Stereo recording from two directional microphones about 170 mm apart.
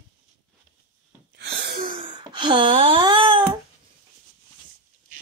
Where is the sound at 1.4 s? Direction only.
65° right (ahead or behind).